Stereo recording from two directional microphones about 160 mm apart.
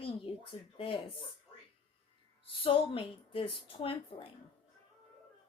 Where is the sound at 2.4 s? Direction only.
35° left (ahead or behind).